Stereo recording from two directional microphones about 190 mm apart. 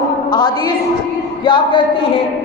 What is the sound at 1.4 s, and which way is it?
Speech, 25° left (ahead or behind).